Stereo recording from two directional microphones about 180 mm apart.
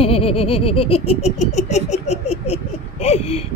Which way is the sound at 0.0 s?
30° left (ahead or behind).